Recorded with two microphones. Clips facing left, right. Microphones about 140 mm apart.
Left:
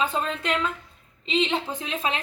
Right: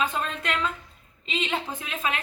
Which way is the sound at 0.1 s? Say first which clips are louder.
Left 3 dB; 25° left (ahead or behind).